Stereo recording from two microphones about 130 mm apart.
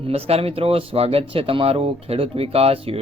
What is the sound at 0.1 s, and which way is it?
Speech, 50° right (ahead or behind).